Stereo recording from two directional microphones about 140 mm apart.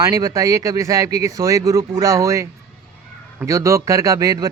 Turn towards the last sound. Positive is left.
turn(degrees=-25)  # may be behind; listen again after turning